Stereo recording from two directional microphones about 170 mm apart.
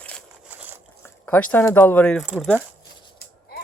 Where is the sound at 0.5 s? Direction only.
10° right (ahead or behind).